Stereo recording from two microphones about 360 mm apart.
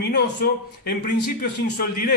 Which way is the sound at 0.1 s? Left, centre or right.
Left.